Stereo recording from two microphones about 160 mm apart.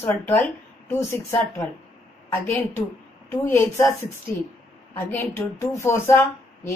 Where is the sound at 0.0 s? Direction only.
15° left (ahead or behind).